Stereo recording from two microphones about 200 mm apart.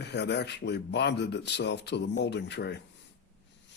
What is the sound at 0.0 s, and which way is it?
Speech, 60° left (ahead or behind).